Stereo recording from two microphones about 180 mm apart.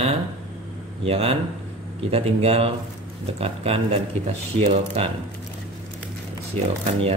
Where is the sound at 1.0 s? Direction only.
35° right (ahead or behind).